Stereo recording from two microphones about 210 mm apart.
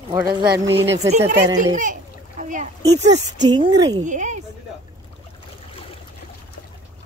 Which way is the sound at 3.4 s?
20° right (ahead or behind).